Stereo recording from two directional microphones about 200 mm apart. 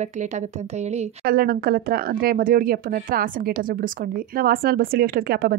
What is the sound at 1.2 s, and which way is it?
Speech, 50° right (ahead or behind).